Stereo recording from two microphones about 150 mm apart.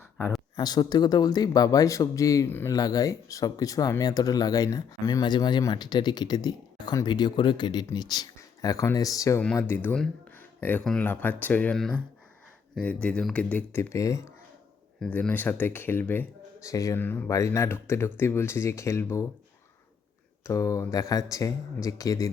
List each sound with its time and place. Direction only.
0.5 s speech: 25° left (ahead or behind)
15.0 s speech: 5° left (ahead or behind)
20.4 s speech: 20° left (ahead or behind)